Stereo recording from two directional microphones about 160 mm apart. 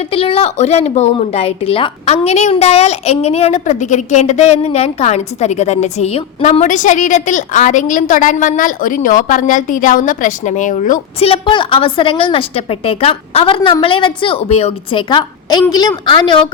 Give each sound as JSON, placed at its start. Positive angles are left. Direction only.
{"t": 0.1, "sound": "a woman's voice", "side_deg": 35}
{"t": 11.2, "sound": "a woman's voice", "side_deg": 35}